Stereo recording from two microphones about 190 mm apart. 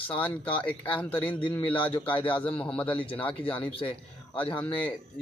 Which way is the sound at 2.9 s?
25° left (ahead or behind).